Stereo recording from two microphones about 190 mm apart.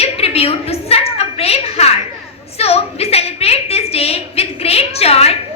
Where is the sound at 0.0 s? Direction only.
30° left (ahead or behind).